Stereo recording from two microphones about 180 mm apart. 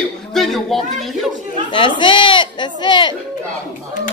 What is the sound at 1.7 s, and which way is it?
Speech, 25° left (ahead or behind).